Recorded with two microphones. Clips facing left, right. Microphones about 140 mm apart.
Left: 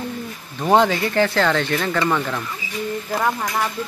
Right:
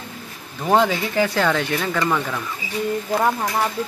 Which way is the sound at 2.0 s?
5° left (ahead or behind).